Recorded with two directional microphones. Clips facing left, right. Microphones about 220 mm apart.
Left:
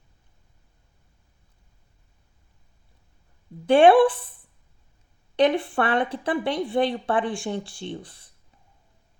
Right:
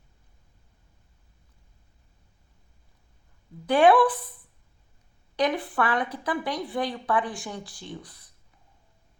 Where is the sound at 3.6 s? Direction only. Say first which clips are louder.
Left 4 dB; 25° left (ahead or behind).